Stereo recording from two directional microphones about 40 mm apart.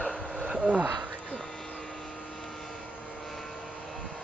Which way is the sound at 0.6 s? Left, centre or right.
Right.